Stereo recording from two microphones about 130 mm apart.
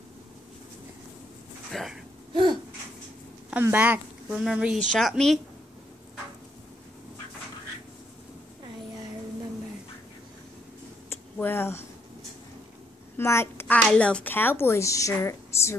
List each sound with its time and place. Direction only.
1.7 s speech: centre (ahead or behind)
2.3 s a sound: 35° right (ahead or behind)
3.6 s speech: 15° right (ahead or behind)
4.9 s a woman's voice: 5° left (ahead or behind)
11.1 s a sound: 15° left (ahead or behind)
13.2 s a child's voice: 20° left (ahead or behind)